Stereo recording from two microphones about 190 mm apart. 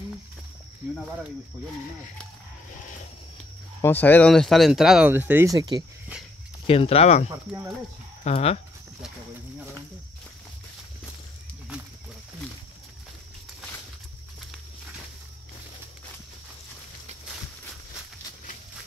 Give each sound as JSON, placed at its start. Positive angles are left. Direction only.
{"t": 3.8, "sound": "speech", "side_deg": 10}
{"t": 6.7, "sound": "speech", "side_deg": 30}